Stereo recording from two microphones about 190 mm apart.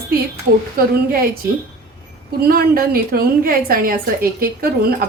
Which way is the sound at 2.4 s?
50° right (ahead or behind).